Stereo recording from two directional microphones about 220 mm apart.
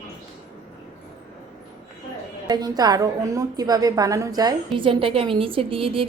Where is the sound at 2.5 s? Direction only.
20° right (ahead or behind).